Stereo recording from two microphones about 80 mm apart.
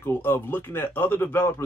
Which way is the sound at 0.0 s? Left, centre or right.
Left.